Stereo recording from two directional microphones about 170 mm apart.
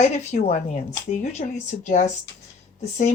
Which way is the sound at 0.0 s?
40° left (ahead or behind).